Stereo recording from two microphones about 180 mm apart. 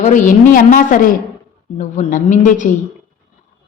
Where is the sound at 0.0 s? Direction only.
45° left (ahead or behind).